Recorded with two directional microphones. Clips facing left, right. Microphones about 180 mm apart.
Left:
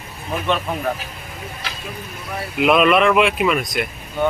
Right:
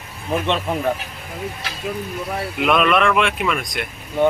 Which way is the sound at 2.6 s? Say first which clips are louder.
Left 3 dB; 5° left (ahead or behind).